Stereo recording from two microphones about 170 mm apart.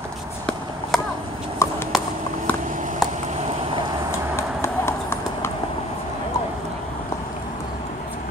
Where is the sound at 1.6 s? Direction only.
15° left (ahead or behind).